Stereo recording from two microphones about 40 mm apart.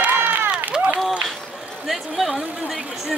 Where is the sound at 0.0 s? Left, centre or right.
Right.